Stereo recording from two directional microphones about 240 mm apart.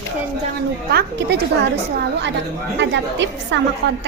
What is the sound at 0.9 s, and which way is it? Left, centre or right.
Speech, right.